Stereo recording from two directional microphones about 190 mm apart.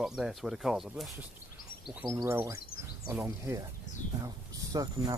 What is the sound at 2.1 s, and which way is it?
Speech, 15° right (ahead or behind).